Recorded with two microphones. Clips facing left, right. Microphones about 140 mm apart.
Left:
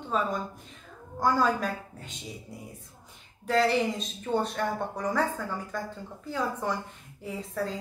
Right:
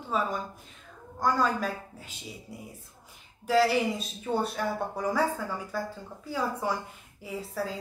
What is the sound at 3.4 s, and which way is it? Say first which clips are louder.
A woman's voice: right 1 dB; 5° right (ahead or behind).